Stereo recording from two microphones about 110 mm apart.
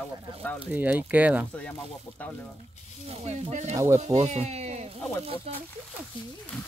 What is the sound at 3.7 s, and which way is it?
Speech, 25° right (ahead or behind).